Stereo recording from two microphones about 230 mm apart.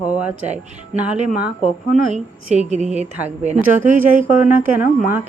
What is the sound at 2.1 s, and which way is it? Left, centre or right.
A woman's voice, right.